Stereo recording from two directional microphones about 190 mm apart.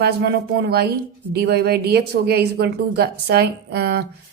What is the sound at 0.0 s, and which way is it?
A woman's voice, 60° right (ahead or behind).